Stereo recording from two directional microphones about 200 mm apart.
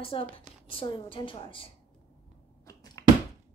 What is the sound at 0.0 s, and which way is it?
A woman's voice, 25° left (ahead or behind).